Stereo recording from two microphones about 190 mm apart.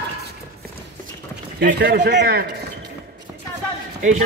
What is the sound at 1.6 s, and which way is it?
A man's voice, 55° right (ahead or behind).